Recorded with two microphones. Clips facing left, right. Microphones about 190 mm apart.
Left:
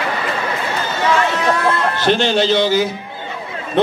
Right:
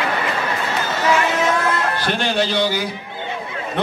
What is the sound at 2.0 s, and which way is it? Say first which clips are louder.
Speech: left 8 dB; 25° left (ahead or behind).